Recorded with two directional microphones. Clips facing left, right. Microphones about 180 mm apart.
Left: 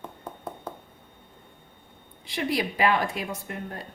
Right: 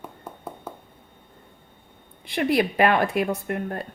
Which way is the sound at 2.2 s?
55° right (ahead or behind).